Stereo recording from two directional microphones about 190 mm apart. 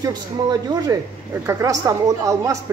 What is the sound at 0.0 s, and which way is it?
A man's voice, 20° right (ahead or behind).